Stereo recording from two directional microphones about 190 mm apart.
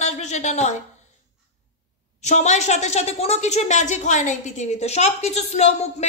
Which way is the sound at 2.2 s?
35° left (ahead or behind).